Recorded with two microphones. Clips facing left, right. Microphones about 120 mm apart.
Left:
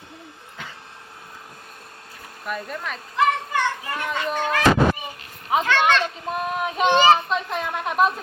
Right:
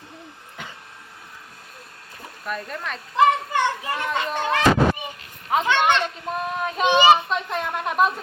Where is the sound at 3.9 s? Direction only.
25° right (ahead or behind).